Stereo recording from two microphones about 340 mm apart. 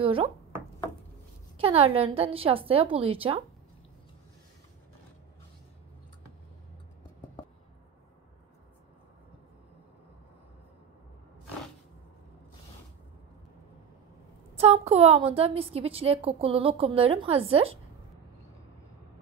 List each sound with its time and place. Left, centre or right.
0.0 s a sound: centre
1.6 s a woman's voice: centre
14.6 s a woman's voice: centre